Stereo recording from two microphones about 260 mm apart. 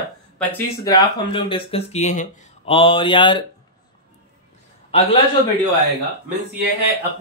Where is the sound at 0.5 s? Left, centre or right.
Centre.